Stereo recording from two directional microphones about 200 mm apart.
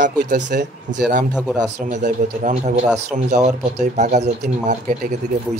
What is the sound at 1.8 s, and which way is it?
A man's voice, 40° right (ahead or behind).